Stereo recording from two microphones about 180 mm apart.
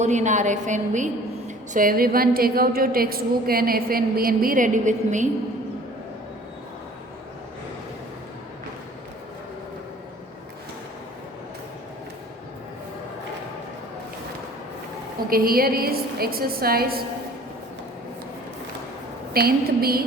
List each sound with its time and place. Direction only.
0.0 s a woman's voice: 40° right (ahead or behind)
15.3 s a woman's voice: 55° right (ahead or behind)
19.3 s a woman's voice: 60° right (ahead or behind)